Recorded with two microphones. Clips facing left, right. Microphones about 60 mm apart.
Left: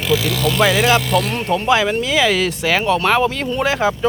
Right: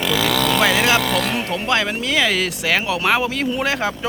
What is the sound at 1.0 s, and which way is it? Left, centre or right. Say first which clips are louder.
Speech: left 2 dB; right.